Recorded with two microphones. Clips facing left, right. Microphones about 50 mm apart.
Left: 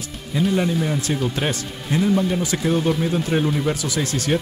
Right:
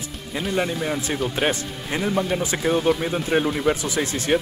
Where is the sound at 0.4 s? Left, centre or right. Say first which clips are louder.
Left 4 dB; centre.